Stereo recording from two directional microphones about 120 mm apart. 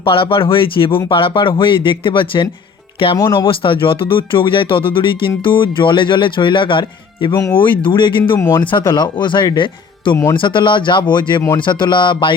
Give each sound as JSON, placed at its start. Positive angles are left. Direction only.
{"t": 0.0, "sound": "speech", "side_deg": 45}
{"t": 7.3, "sound": "speech", "side_deg": 25}
{"t": 7.9, "sound": "speech", "side_deg": 40}